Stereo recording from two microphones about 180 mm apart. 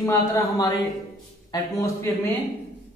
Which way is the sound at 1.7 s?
15° left (ahead or behind).